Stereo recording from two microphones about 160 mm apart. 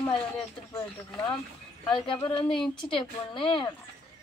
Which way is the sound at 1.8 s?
35° left (ahead or behind).